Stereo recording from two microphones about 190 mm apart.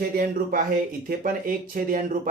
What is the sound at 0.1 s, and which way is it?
Speech, 50° right (ahead or behind).